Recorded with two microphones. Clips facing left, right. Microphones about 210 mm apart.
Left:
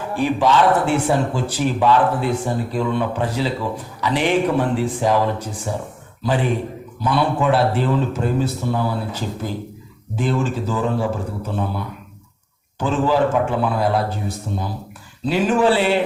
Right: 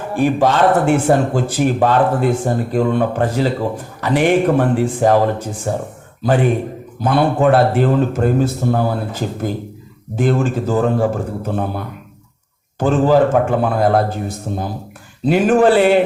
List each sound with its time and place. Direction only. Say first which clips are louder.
0.2 s speech: right 3 dB; 50° right (ahead or behind)